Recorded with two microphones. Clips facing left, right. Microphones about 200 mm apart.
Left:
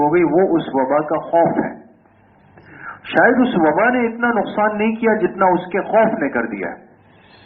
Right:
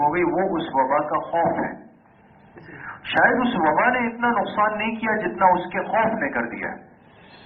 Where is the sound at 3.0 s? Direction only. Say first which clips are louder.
Left 7 dB; 55° left (ahead or behind).